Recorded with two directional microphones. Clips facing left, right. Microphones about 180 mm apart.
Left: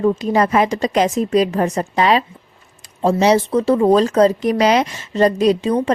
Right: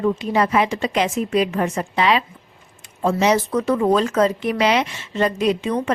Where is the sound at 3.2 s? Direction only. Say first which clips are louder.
Left 4 dB; 30° left (ahead or behind).